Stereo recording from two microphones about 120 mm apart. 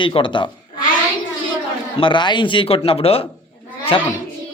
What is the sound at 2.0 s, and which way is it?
Speech, 40° left (ahead or behind).